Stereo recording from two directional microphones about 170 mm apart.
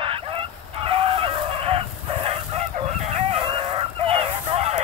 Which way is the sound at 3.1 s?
35° right (ahead or behind).